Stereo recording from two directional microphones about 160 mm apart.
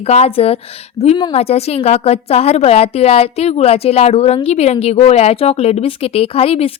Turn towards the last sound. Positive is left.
turn(degrees=35)  # may be behind; listen again after turning